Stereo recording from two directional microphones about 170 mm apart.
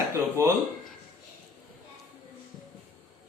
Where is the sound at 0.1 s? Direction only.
15° right (ahead or behind).